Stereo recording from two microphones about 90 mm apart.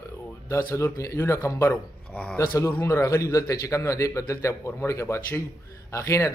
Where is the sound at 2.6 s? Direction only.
30° left (ahead or behind).